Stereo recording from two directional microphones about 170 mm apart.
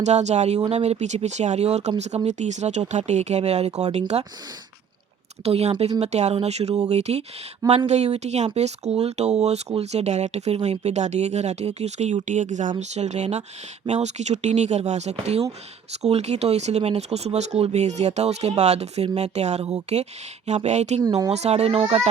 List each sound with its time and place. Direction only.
0.0 s speech: 40° right (ahead or behind)
5.5 s speech: 40° right (ahead or behind)
21.0 s speech: 20° right (ahead or behind)
21.2 s speech: 40° right (ahead or behind)